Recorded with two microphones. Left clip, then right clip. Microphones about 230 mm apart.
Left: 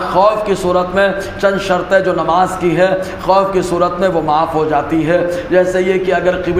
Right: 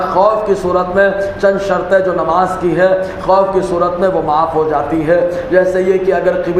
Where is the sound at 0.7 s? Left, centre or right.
Left.